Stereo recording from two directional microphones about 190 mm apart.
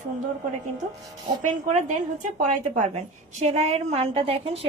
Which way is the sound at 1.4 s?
40° right (ahead or behind).